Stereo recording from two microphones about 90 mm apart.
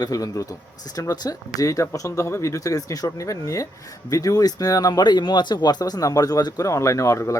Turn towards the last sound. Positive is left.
turn(degrees=35)  # may be behind; listen again after turning